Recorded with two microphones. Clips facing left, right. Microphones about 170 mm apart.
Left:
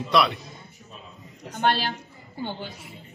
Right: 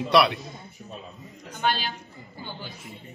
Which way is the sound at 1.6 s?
70° left (ahead or behind).